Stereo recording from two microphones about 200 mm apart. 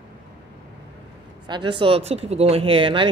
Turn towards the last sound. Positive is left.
turn(degrees=-25)  # may be behind; listen again after turning